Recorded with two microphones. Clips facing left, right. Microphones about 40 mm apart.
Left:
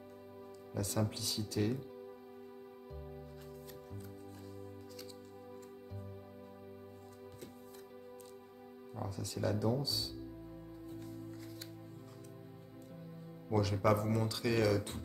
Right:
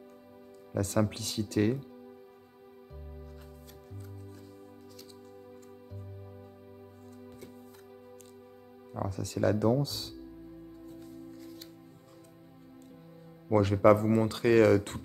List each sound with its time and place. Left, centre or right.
0.7 s speech: right
8.9 s speech: right
13.5 s speech: right